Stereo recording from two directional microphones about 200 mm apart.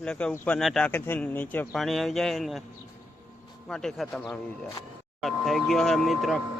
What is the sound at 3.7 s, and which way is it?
Speech, centre (ahead or behind).